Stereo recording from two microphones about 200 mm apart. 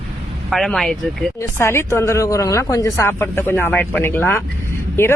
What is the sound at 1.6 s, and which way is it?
Speech, 10° left (ahead or behind).